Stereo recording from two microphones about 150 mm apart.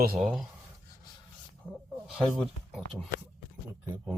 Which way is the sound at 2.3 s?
10° left (ahead or behind).